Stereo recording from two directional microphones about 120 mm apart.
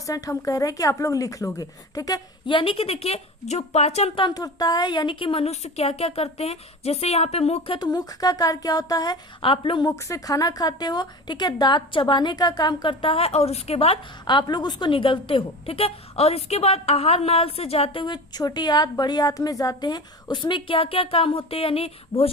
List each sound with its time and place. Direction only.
0.0 s a woman's voice: 30° left (ahead or behind)
2.5 s a woman's voice: 45° left (ahead or behind); by 4.2 s 65° left (ahead or behind)
4.2 s a woman's voice: 35° left (ahead or behind); by 7.8 s 60° left (ahead or behind)
7.8 s a woman's voice: 35° left (ahead or behind)
9.4 s a woman's voice: 45° left (ahead or behind)
9.8 s a woman's voice: 25° left (ahead or behind); by 14.0 s 55° left (ahead or behind)
14.3 s a woman's voice: 40° left (ahead or behind); by 18.0 s 55° left (ahead or behind)
18.0 s a woman's voice: 35° left (ahead or behind); by 22.3 s 55° left (ahead or behind)